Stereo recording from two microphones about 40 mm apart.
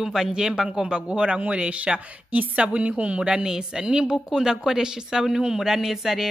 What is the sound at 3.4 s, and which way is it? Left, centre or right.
Speech, centre.